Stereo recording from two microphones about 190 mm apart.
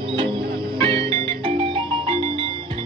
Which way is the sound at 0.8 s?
30° right (ahead or behind).